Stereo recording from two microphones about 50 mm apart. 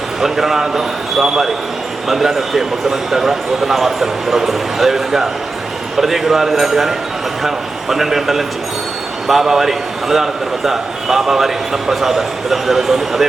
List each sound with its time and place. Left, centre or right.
0.2 s a man's voice: centre